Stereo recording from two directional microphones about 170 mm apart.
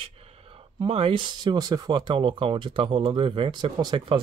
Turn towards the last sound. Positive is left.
turn(degrees=-25)  # may be behind; listen again after turning